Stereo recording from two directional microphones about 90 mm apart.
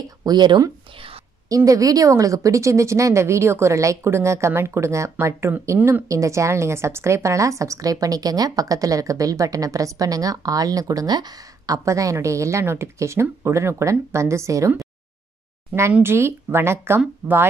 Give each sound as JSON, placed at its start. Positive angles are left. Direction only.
{"t": 0.2, "sound": "speech", "side_deg": -50}
{"t": 1.5, "sound": "a woman's voice", "side_deg": -40}
{"t": 16.0, "sound": "speech", "side_deg": -25}